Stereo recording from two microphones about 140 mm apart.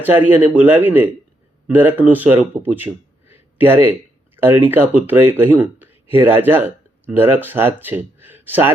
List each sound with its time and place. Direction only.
0.0 s speech: 15° right (ahead or behind)